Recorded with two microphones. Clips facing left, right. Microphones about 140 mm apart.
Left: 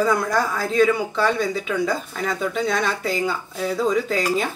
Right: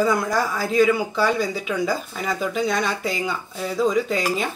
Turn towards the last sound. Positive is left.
turn(degrees=0)  # may be behind; listen again after turning